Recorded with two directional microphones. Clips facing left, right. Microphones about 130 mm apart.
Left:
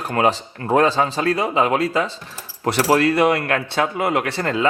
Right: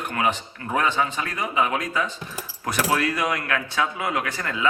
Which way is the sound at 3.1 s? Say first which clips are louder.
Left 8 dB; 65° left (ahead or behind).